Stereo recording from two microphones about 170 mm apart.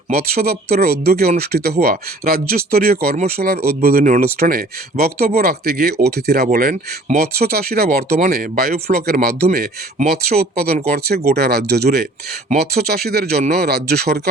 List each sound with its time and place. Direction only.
0.1 s speech: 65° right (ahead or behind)